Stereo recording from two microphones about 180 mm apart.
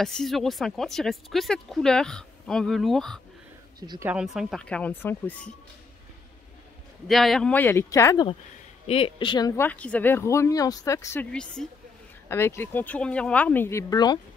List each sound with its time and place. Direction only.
0.0 s speech: centre (ahead or behind)
7.1 s speech: centre (ahead or behind); by 8.3 s 15° left (ahead or behind)
8.8 s speech: 30° left (ahead or behind)
9.6 s speech: 10° left (ahead or behind); by 14.2 s 25° left (ahead or behind)